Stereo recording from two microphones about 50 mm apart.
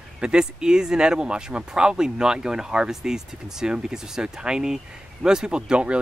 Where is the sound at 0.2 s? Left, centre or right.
Centre.